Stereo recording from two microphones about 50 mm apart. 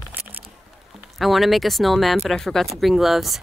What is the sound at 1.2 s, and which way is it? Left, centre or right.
Speech, centre.